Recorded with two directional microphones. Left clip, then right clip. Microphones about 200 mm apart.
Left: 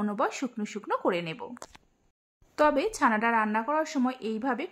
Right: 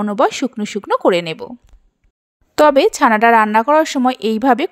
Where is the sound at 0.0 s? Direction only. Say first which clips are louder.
Right 14 dB; 35° right (ahead or behind).